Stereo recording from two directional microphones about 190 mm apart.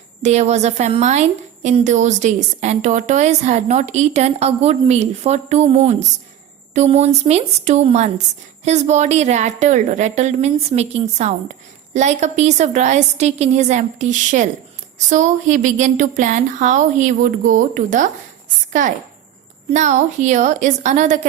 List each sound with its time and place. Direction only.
0.2 s a woman's voice: 35° right (ahead or behind)